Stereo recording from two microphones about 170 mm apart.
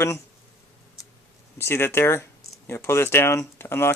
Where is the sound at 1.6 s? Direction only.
15° left (ahead or behind).